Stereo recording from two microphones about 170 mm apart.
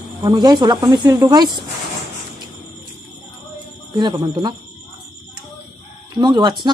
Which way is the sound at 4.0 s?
25° right (ahead or behind).